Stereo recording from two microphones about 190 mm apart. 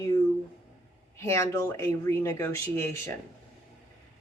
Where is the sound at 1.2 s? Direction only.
15° left (ahead or behind).